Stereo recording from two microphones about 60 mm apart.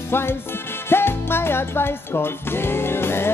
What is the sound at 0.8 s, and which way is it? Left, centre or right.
Music, left.